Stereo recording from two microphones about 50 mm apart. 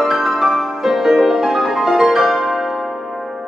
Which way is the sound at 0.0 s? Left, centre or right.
Centre.